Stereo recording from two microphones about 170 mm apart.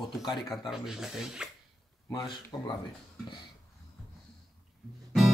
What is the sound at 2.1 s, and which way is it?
Speech, 25° left (ahead or behind).